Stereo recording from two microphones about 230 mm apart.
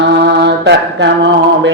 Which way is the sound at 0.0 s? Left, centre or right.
Right.